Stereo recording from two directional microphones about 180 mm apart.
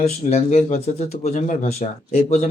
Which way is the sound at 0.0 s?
35° left (ahead or behind).